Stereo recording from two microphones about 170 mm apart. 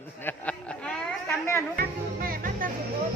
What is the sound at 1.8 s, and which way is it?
Music, 55° right (ahead or behind).